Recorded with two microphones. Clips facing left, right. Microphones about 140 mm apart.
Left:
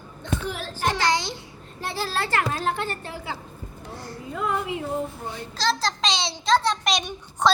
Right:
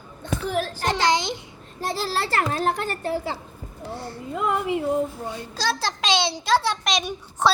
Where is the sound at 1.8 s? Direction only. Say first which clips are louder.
Right 2 dB; 35° right (ahead or behind).